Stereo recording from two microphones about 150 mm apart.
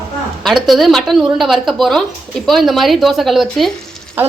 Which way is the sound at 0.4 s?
Centre (ahead or behind).